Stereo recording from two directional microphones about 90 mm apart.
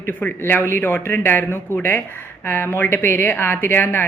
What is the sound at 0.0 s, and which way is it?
A woman's voice, 20° left (ahead or behind).